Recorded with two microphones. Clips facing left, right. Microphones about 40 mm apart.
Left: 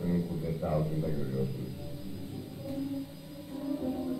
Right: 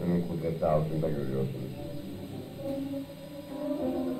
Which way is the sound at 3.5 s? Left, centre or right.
Right.